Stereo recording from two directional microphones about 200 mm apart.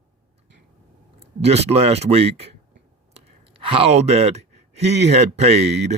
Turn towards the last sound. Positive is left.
turn(degrees=-30)  # may be behind; listen again after turning